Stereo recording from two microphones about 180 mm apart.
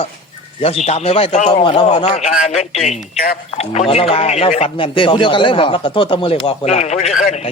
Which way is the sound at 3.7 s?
35° left (ahead or behind).